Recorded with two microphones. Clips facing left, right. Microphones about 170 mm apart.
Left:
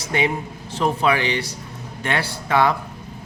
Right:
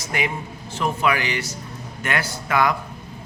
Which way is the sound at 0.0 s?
30° left (ahead or behind).